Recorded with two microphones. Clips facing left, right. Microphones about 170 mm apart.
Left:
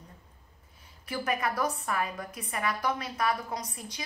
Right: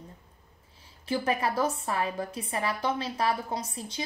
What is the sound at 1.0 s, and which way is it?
A woman's voice, 30° right (ahead or behind).